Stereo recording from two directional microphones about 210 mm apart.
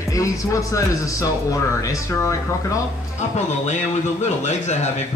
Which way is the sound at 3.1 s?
35° left (ahead or behind).